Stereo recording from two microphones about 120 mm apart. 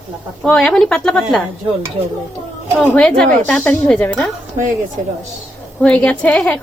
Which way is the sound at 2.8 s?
10° left (ahead or behind).